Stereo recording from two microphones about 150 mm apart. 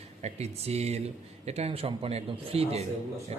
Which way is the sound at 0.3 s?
45° right (ahead or behind).